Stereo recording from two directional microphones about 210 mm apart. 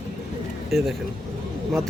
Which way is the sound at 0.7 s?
Centre (ahead or behind).